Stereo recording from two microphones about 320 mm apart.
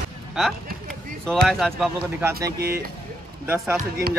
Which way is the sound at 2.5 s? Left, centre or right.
Right.